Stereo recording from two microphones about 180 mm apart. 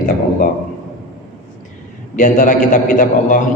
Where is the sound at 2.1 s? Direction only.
45° left (ahead or behind).